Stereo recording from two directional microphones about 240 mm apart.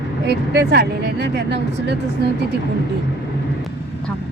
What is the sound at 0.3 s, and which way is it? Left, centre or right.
Speech, right.